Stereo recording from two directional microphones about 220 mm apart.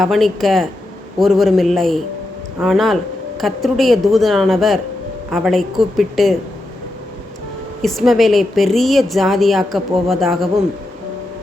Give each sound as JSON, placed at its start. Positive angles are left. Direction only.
{"t": 0.0, "sound": "a woman's voice", "side_deg": 0}
{"t": 7.8, "sound": "a woman's voice", "side_deg": 0}